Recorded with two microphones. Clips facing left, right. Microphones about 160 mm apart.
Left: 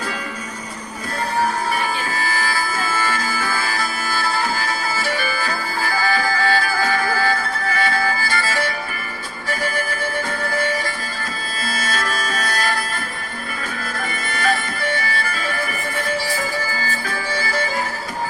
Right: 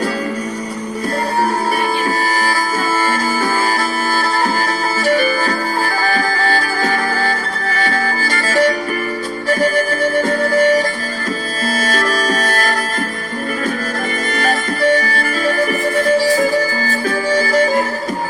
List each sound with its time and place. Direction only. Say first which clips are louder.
3.3 s music: right 7 dB; 40° right (ahead or behind)
11.6 s music: right 6 dB; 40° right (ahead or behind)
14.4 s music: right 6 dB; 40° right (ahead or behind)